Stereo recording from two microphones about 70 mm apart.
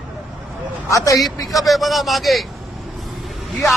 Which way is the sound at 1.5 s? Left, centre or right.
Centre.